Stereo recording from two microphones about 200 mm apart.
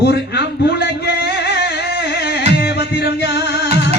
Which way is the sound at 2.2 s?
55° left (ahead or behind).